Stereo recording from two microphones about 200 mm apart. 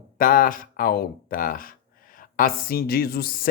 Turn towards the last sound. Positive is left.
turn(degrees=50)  # may be behind; listen again after turning